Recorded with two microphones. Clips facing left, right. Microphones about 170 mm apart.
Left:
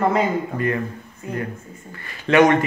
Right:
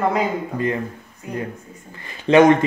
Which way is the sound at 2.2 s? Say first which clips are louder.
Right 3 dB; 25° right (ahead or behind).